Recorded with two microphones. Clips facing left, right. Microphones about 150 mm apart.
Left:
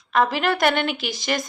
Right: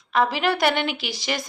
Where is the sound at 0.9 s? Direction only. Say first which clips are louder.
Left 2 dB; 50° left (ahead or behind).